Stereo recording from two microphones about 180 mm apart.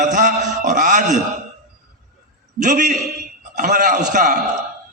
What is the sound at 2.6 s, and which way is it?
A man's voice, 45° right (ahead or behind).